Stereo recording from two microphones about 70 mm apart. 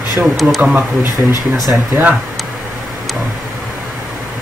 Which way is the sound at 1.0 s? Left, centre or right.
Left.